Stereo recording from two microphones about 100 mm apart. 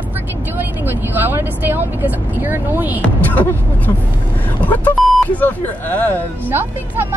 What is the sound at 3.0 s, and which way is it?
A man's voice, 15° left (ahead or behind).